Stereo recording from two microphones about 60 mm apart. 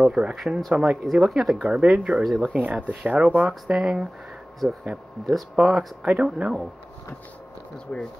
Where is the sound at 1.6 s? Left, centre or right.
Centre.